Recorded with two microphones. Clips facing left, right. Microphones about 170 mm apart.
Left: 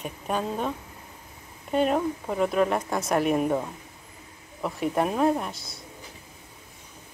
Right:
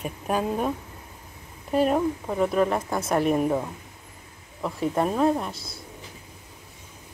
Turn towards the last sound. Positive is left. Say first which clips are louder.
# right 3 dB
turn(degrees=-30)  # may be behind; listen again after turning